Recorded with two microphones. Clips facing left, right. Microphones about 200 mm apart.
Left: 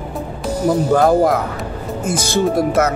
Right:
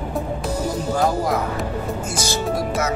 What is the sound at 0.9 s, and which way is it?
Speech, 55° left (ahead or behind).